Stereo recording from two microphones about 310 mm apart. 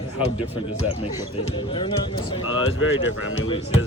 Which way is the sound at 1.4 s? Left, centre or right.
Centre.